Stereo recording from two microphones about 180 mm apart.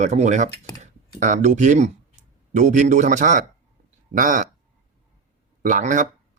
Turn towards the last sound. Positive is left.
turn(degrees=-45)  # may be behind; listen again after turning